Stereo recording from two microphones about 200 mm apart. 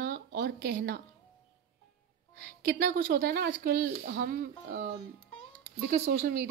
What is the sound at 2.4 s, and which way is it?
Speech, 50° right (ahead or behind).